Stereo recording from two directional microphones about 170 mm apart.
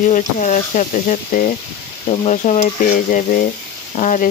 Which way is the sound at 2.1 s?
40° left (ahead or behind).